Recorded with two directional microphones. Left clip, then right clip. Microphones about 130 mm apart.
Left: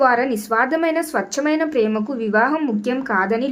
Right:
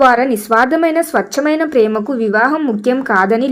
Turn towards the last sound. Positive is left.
turn(degrees=-25)  # may be behind; listen again after turning